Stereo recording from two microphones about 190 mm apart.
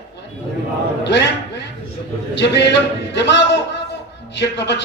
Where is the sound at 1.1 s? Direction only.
65° left (ahead or behind).